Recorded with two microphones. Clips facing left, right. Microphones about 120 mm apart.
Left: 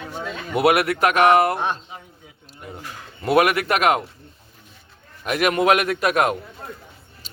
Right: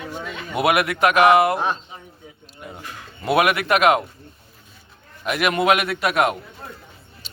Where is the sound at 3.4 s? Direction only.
40° left (ahead or behind).